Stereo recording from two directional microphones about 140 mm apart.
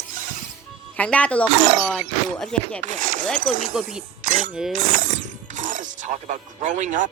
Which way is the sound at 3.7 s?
5° right (ahead or behind).